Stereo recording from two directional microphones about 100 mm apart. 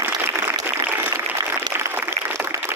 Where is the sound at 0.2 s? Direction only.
25° right (ahead or behind).